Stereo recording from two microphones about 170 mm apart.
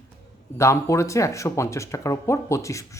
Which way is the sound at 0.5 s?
15° left (ahead or behind).